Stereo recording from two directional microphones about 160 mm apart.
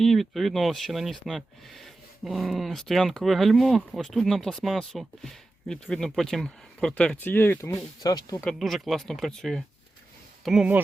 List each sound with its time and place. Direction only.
0.0 s speech: centre (ahead or behind); by 8.4 s 25° left (ahead or behind)
8.4 s speech: centre (ahead or behind)